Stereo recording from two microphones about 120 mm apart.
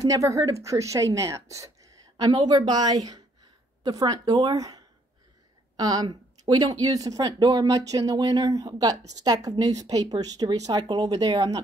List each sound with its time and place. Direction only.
0.0 s a woman's voice: 25° right (ahead or behind)